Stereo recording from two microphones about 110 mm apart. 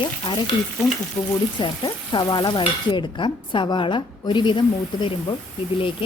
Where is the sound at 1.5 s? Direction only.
45° left (ahead or behind).